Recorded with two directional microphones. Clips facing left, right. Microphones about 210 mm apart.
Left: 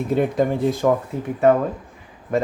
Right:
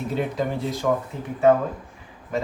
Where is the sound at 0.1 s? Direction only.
50° left (ahead or behind).